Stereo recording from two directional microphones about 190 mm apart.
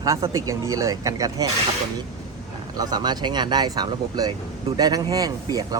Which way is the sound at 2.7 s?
20° right (ahead or behind).